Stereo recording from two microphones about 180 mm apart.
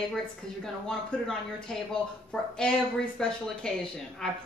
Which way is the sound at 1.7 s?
Centre (ahead or behind).